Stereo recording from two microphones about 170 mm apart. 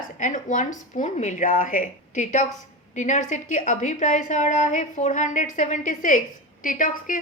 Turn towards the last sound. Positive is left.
turn(degrees=50)  # may be behind; listen again after turning